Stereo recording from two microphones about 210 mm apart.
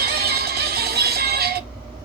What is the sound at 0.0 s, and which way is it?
Music, 50° right (ahead or behind).